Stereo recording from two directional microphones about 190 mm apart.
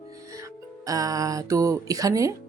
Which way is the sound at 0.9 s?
20° right (ahead or behind).